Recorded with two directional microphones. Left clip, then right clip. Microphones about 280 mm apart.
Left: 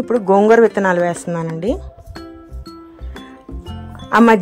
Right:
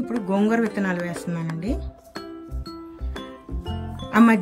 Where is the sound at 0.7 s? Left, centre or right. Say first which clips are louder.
Left 12 dB; centre.